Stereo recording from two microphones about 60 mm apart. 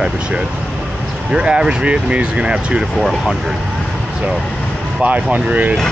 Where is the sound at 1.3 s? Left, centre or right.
Centre.